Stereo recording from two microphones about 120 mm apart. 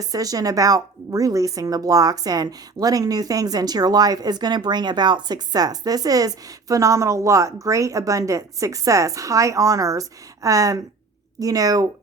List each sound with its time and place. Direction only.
0.0 s a woman's voice: 30° right (ahead or behind)